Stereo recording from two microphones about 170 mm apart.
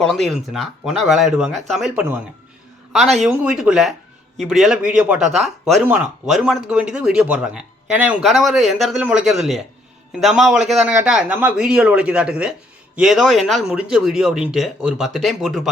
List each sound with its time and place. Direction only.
0.0 s a man's voice: centre (ahead or behind)